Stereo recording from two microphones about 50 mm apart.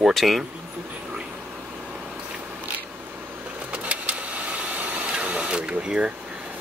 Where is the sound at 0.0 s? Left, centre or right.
Centre.